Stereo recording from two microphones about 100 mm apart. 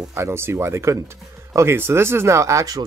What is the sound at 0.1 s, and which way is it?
Speech, 25° right (ahead or behind).